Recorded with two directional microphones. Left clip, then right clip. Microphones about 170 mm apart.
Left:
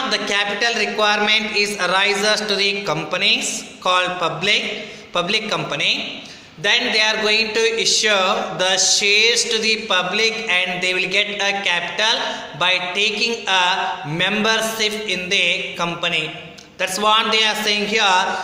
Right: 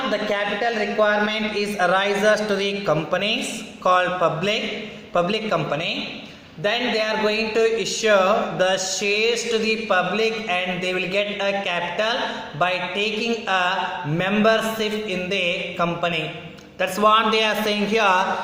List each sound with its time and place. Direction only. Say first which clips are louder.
0.1 s a man's voice: left 3 dB; centre (ahead or behind)
1.3 s speech: left 7 dB; 10° right (ahead or behind)